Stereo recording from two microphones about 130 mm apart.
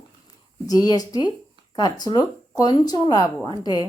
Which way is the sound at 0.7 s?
30° left (ahead or behind).